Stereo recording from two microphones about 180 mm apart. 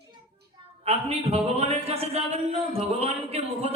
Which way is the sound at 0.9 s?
35° right (ahead or behind).